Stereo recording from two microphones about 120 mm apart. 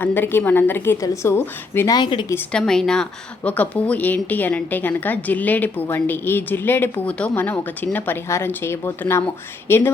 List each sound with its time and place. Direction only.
0.0 s a woman's voice: 15° left (ahead or behind)
1.9 s speech: 40° left (ahead or behind)
2.5 s a woman's voice: 5° left (ahead or behind)